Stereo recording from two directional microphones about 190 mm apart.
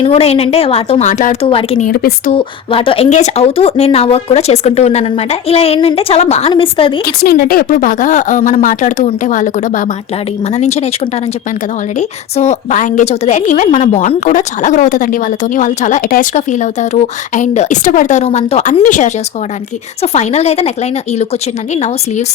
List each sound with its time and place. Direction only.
0.0 s speech: 30° left (ahead or behind)
1.9 s a woman's voice: 50° left (ahead or behind)
2.3 s speech: 25° left (ahead or behind)
7.0 s a woman's voice: 50° left (ahead or behind); by 10.8 s 35° left (ahead or behind)
11.9 s speech: 35° left (ahead or behind)